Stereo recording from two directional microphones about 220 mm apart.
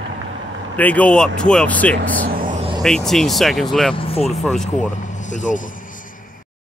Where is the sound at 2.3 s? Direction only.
40° right (ahead or behind).